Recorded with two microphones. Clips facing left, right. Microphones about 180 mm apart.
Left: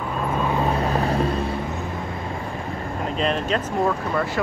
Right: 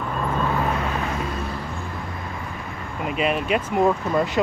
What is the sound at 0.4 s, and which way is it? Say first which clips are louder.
Vehicle: left 1 dB; 15° left (ahead or behind).